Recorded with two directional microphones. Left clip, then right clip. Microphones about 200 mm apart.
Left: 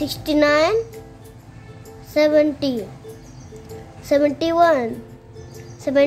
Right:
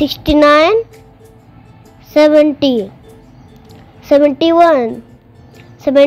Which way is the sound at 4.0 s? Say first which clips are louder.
Right 8 dB; 20° right (ahead or behind).